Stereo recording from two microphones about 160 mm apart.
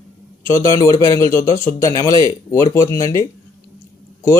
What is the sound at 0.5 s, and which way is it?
Speech, 20° left (ahead or behind).